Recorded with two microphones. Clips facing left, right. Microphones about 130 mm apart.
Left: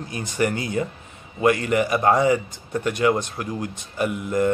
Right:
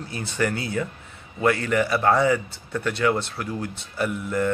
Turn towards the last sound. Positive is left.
turn(degrees=15)  # may be behind; listen again after turning